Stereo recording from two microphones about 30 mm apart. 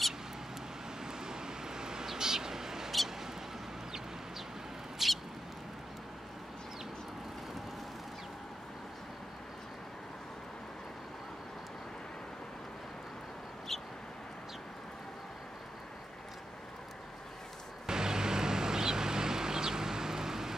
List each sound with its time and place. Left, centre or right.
1.0 s vehicle: right
2.0 s bird: centre
4.9 s mouse: centre
17.8 s vehicle: right